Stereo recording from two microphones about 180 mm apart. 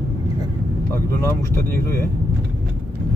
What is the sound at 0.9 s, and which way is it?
Speech, 15° left (ahead or behind).